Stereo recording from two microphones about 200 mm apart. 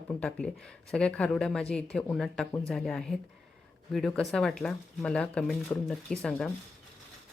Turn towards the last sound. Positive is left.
turn(degrees=5)  # may be behind; listen again after turning